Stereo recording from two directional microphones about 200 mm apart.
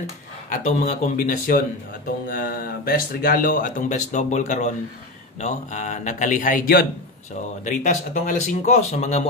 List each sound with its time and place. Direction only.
0.5 s speech: 35° left (ahead or behind)